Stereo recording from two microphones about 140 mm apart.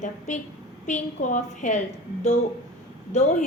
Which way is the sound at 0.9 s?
65° left (ahead or behind).